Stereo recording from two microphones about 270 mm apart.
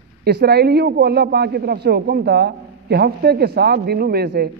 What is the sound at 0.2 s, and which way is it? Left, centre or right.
A man's voice, right.